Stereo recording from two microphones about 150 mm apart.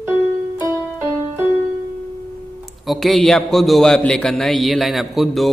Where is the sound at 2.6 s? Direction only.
Centre (ahead or behind).